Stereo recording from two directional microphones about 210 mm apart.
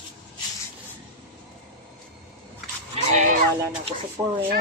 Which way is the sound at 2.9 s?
35° right (ahead or behind).